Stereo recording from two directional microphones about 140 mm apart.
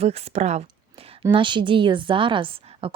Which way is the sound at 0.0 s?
45° right (ahead or behind).